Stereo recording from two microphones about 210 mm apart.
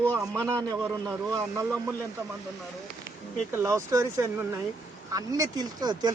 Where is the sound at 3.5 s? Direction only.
15° right (ahead or behind).